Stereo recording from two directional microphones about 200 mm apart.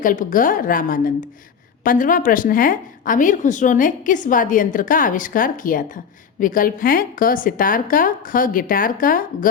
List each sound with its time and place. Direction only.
0.0 s a woman's voice: 40° left (ahead or behind)